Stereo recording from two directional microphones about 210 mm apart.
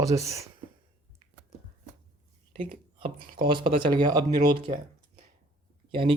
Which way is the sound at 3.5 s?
25° right (ahead or behind).